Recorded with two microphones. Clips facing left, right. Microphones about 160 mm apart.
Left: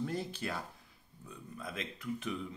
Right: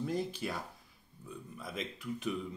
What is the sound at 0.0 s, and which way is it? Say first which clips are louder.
Speech: right 2 dB; 10° right (ahead or behind).